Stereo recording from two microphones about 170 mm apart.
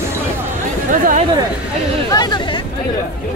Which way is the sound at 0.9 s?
50° right (ahead or behind).